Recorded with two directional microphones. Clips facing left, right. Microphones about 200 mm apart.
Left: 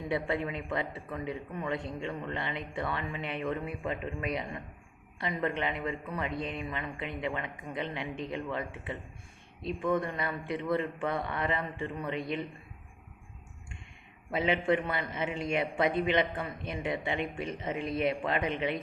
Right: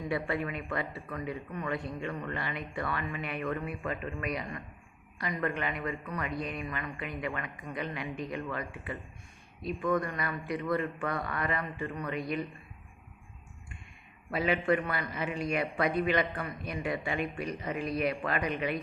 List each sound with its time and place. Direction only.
0.1 s speech: 20° left (ahead or behind)
14.3 s speech: 25° left (ahead or behind)